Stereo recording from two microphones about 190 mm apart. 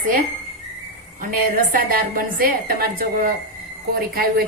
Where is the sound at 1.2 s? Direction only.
50° right (ahead or behind).